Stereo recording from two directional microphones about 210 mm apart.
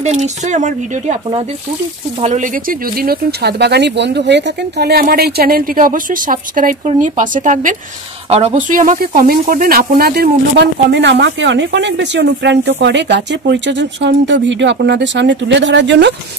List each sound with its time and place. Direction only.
0.0 s speech: 35° right (ahead or behind)
3.0 s speech: 50° right (ahead or behind)